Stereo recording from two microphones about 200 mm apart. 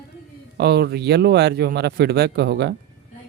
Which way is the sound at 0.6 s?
55° right (ahead or behind).